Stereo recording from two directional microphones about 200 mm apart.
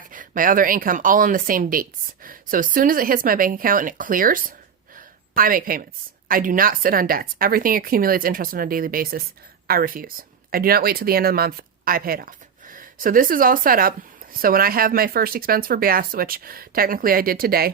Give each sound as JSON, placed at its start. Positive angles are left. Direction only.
{"t": 0.1, "sound": "speech", "side_deg": -40}
{"t": 4.9, "sound": "a sound", "side_deg": -45}
{"t": 6.2, "sound": "speech", "side_deg": -45}